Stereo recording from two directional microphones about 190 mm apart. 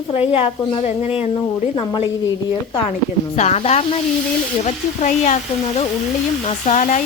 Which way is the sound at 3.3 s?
35° left (ahead or behind).